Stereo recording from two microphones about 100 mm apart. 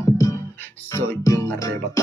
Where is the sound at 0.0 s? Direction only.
30° left (ahead or behind).